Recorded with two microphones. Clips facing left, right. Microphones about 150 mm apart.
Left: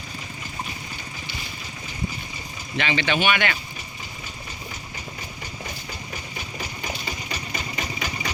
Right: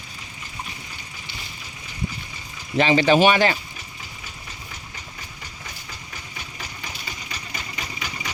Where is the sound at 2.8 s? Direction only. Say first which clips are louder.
Right 8 dB; 35° right (ahead or behind).